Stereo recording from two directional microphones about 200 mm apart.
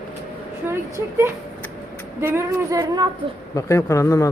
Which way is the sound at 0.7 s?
10° right (ahead or behind).